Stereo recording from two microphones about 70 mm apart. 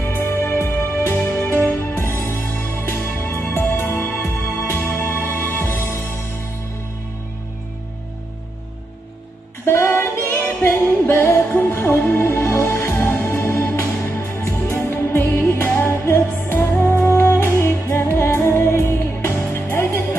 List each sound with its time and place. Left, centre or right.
0.1 s music: left
9.7 s music: left